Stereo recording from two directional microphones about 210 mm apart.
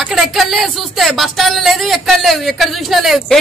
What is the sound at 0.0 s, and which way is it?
Speech, centre (ahead or behind).